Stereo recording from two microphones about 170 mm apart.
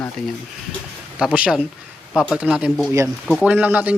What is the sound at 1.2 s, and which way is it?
A man's voice, 5° right (ahead or behind).